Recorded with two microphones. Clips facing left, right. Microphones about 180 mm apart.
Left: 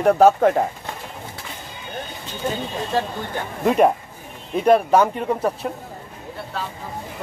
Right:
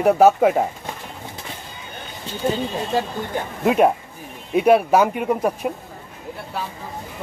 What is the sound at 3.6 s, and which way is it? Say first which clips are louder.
A man's voice: even; centre (ahead or behind).